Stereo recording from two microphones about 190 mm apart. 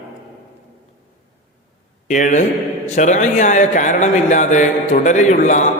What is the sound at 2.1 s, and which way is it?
A man's voice, 40° left (ahead or behind).